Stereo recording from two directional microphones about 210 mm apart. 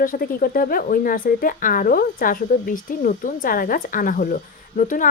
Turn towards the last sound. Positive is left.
turn(degrees=40)  # may be behind; listen again after turning